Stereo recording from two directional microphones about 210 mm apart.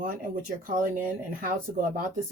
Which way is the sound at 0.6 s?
40° right (ahead or behind).